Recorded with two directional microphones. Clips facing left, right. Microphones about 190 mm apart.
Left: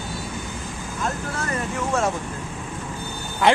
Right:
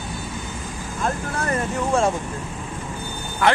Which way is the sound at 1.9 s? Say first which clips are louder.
Right 3 dB; 30° right (ahead or behind).